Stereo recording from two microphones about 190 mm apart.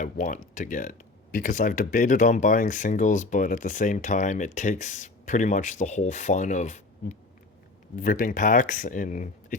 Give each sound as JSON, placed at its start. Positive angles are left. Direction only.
{"t": 0.0, "sound": "speech", "side_deg": 40}